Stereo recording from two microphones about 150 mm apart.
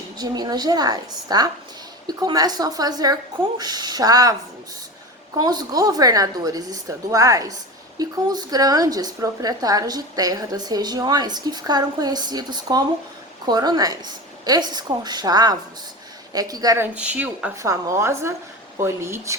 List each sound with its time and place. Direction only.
0.2 s a woman's voice: 30° right (ahead or behind)
5.4 s a woman's voice: 25° right (ahead or behind)
16.8 s speech: 10° right (ahead or behind)
17.6 s a woman's voice: 20° right (ahead or behind)